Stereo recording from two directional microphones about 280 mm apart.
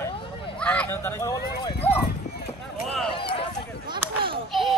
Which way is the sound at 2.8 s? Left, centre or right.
Centre.